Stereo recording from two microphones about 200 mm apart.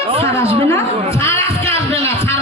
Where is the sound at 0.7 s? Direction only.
15° left (ahead or behind).